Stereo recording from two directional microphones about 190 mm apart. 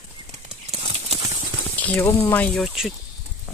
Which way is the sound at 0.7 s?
30° right (ahead or behind).